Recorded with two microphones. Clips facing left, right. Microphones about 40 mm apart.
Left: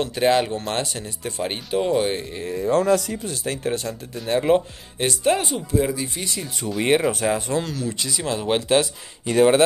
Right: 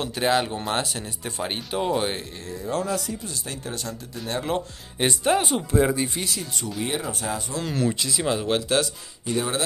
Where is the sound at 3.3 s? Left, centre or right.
Left.